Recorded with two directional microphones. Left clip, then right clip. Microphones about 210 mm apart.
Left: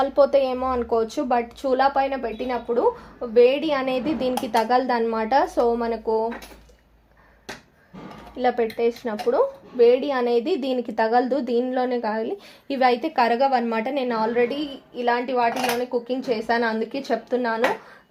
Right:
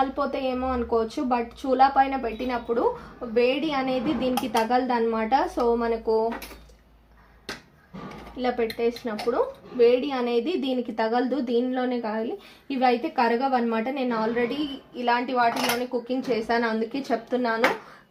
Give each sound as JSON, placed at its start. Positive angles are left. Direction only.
{"t": 0.2, "sound": "a woman's voice", "side_deg": 50}
{"t": 8.4, "sound": "a woman's voice", "side_deg": 50}